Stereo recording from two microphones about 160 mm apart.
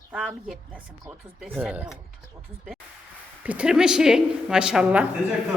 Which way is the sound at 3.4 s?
10° right (ahead or behind).